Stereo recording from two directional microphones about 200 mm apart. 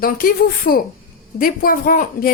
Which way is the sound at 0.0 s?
45° left (ahead or behind).